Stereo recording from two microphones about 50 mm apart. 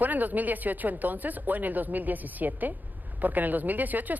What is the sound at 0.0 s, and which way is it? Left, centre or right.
Speech, right.